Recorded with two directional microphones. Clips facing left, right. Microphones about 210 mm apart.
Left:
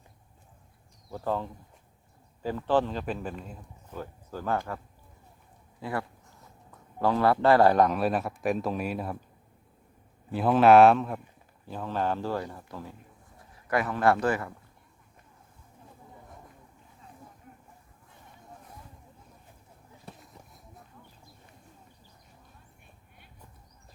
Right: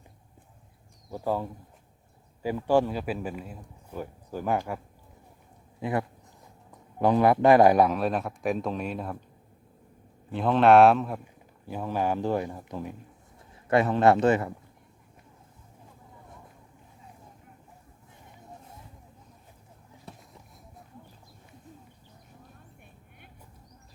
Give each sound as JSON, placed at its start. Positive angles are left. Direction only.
{"t": 1.1, "sound": "a man's voice", "side_deg": -10}
{"t": 5.8, "sound": "a sound", "side_deg": -20}
{"t": 7.9, "sound": "speech", "side_deg": 0}
{"t": 10.3, "sound": "speech", "side_deg": 5}
{"t": 11.7, "sound": "a man's voice", "side_deg": -10}